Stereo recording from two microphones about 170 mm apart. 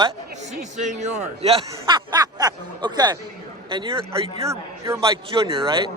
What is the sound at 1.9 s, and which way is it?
Speech, 25° right (ahead or behind).